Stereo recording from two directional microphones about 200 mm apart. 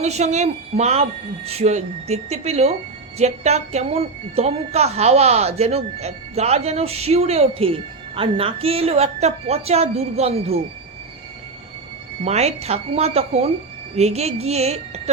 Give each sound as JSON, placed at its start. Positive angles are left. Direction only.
{"t": 0.0, "sound": "a woman's voice", "side_deg": -35}
{"t": 12.2, "sound": "a woman's voice", "side_deg": -35}